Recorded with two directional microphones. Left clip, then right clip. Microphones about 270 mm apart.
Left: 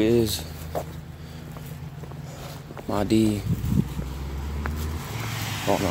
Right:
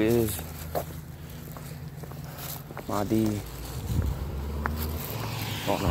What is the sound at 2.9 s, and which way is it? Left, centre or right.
Speech, left.